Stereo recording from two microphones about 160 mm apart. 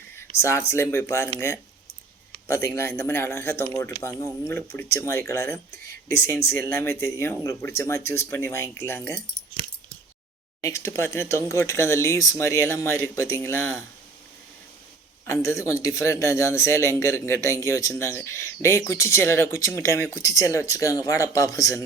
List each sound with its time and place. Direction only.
0.2 s a sound: 15° left (ahead or behind)
0.7 s speech: 15° left (ahead or behind)
2.5 s speech: 15° left (ahead or behind)
10.6 s speech: 20° left (ahead or behind)
15.3 s speech: 20° left (ahead or behind)